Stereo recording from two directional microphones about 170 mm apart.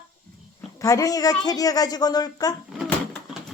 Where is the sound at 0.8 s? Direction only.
20° left (ahead or behind).